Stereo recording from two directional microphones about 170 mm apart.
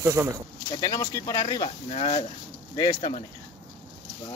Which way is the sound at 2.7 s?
25° left (ahead or behind).